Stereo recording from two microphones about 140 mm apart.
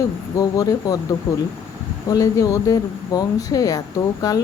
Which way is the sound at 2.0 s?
25° left (ahead or behind).